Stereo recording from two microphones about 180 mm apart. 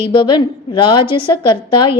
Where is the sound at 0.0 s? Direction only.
25° left (ahead or behind).